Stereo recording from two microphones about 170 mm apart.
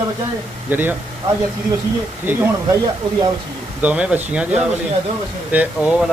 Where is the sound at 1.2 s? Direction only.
20° right (ahead or behind).